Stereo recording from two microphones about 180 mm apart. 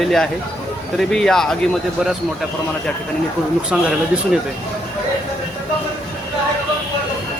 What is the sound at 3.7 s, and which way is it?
Speech, 5° right (ahead or behind).